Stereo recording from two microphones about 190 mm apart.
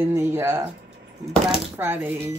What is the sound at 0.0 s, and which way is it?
Speech, 10° right (ahead or behind).